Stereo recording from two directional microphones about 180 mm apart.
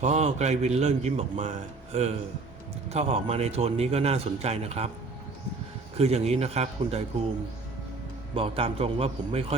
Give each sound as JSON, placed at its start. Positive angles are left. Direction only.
{"t": 0.0, "sound": "a man's voice", "side_deg": -40}
{"t": 6.0, "sound": "a man's voice", "side_deg": -35}
{"t": 8.4, "sound": "a man's voice", "side_deg": -30}